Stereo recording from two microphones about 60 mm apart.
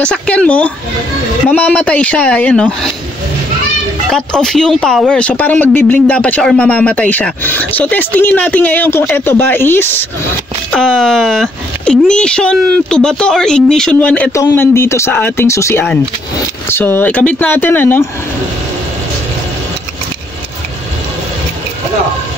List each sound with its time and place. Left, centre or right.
0.0 s speech: centre
4.1 s speech: centre
5.4 s speech: left
8.9 s speech: left
10.7 s speech: centre
14.0 s speech: left
14.5 s speech: left
15.3 s speech: left
15.7 s speech: left
17.5 s speech: left